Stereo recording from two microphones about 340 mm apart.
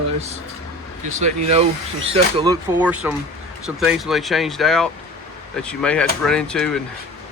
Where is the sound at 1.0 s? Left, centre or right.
Centre.